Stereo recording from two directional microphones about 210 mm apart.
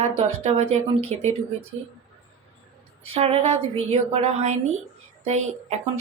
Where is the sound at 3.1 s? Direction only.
30° right (ahead or behind).